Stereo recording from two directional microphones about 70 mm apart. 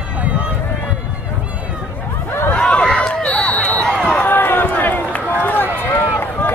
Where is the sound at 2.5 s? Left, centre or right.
Centre.